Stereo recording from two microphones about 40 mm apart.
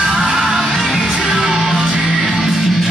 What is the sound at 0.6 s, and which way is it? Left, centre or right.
Music, centre.